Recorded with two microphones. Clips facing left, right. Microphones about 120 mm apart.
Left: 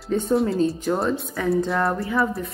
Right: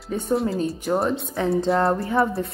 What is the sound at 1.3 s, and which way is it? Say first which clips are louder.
A woman's voice: right 3 dB; 25° right (ahead or behind).